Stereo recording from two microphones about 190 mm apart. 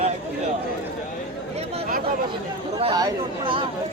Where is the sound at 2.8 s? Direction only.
30° right (ahead or behind).